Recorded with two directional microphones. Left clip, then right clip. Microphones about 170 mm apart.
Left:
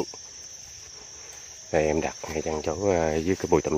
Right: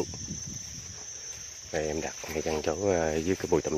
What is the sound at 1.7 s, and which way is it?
Speech, 30° left (ahead or behind).